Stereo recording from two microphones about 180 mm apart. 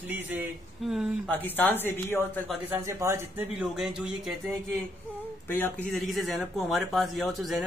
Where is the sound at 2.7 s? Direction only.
15° right (ahead or behind).